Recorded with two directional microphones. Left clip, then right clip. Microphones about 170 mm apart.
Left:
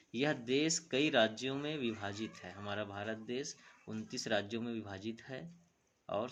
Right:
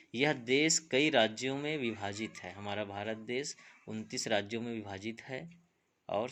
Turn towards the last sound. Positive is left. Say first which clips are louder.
# right 3 dB
turn(degrees=-15)  # may be behind; listen again after turning